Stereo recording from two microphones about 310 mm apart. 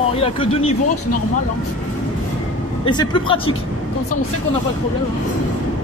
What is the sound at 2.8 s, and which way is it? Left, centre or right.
Speech, centre.